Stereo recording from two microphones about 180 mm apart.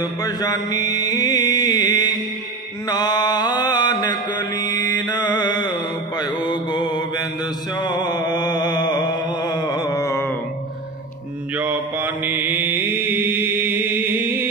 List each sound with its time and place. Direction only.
0.0 s mantra: 20° left (ahead or behind)
7.8 s music: 25° left (ahead or behind)
11.5 s mantra: 10° right (ahead or behind)